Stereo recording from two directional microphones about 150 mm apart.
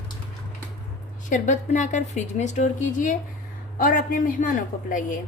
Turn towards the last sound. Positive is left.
turn(degrees=60)  # may be behind; listen again after turning